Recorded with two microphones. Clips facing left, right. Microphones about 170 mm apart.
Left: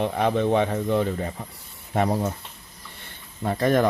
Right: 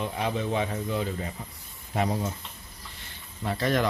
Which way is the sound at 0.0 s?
60° left (ahead or behind).